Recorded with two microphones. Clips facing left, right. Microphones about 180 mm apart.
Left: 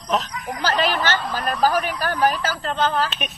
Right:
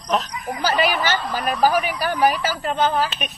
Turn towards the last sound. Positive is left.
turn(degrees=-10)  # may be behind; listen again after turning